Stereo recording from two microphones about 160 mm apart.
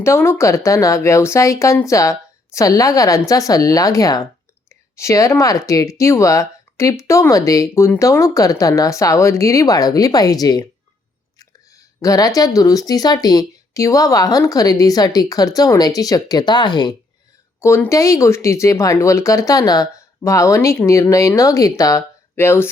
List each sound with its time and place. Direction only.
0.0 s speech: 15° left (ahead or behind)
17.6 s speech: 15° left (ahead or behind)